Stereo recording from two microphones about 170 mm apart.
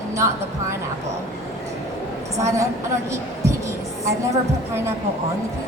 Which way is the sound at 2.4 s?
20° right (ahead or behind).